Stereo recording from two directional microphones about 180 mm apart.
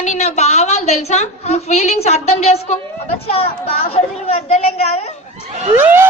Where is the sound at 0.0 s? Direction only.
40° left (ahead or behind).